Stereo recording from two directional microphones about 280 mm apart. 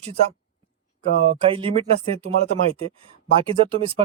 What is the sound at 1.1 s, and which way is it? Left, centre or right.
Speech, right.